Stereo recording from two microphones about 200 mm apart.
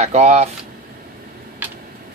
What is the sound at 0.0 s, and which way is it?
Speech, 35° right (ahead or behind).